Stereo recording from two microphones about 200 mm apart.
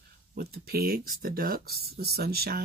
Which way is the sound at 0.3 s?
50° right (ahead or behind).